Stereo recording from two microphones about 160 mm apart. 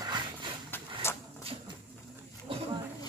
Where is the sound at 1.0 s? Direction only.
15° left (ahead or behind).